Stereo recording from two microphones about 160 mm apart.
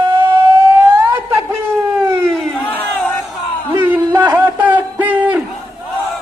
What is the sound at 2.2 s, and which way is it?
Battle cry, 5° left (ahead or behind).